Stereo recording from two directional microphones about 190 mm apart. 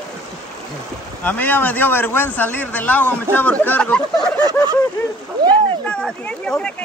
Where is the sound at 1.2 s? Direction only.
10° left (ahead or behind).